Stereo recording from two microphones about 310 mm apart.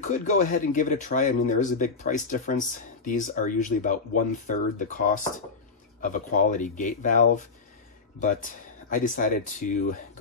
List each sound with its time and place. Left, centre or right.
0.0 s speech: left